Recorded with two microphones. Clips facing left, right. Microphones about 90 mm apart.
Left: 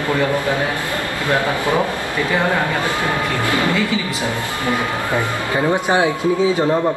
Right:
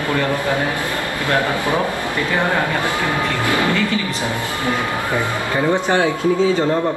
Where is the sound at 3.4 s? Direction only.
20° right (ahead or behind).